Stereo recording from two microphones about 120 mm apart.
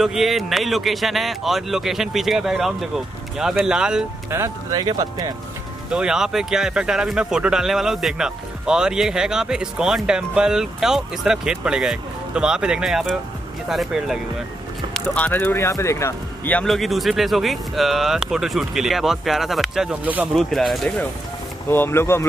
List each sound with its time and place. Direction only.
0.0 s speech: centre (ahead or behind)
4.3 s speech: 20° right (ahead or behind)
4.7 s speech: 35° right (ahead or behind)
5.9 s speech: 5° right (ahead or behind)
15.0 s speech: 15° left (ahead or behind)
16.4 s speech: 5° left (ahead or behind); by 20.2 s 10° right (ahead or behind)
20.3 s speech: centre (ahead or behind)
21.6 s speech: 20° left (ahead or behind)